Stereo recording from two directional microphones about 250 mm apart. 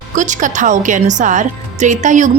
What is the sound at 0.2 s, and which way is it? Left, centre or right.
A woman's voice, right.